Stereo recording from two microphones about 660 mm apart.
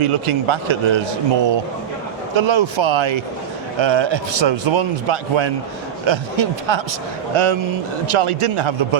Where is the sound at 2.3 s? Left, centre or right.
Right.